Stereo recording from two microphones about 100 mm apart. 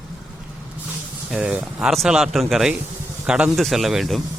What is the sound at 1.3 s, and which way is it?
Speech, 10° right (ahead or behind).